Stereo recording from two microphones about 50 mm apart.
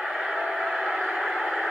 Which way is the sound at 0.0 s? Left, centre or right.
Centre.